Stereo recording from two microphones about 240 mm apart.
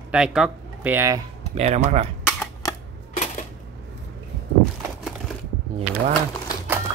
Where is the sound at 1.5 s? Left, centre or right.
Right.